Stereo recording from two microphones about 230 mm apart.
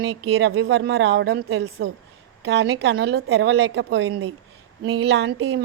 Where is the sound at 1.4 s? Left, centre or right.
Right.